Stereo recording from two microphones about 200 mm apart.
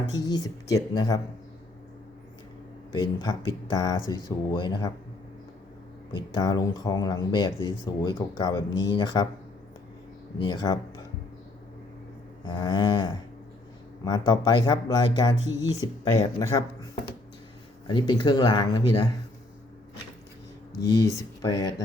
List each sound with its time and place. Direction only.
0.1 s speech: 20° left (ahead or behind)
3.0 s speech: 20° left (ahead or behind)
6.1 s speech: 20° left (ahead or behind)
10.3 s speech: 20° left (ahead or behind)
12.5 s speech: 20° left (ahead or behind)
17.8 s speech: 20° left (ahead or behind)
20.8 s speech: 15° left (ahead or behind)